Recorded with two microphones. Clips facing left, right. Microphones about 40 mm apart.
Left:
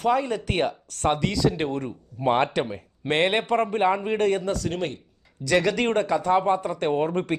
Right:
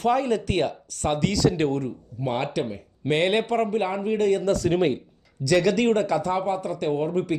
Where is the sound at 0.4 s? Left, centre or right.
Left.